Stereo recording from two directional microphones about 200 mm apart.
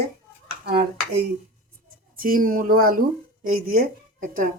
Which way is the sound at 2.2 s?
45° right (ahead or behind).